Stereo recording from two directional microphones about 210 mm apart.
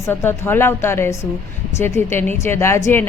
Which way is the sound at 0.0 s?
10° left (ahead or behind).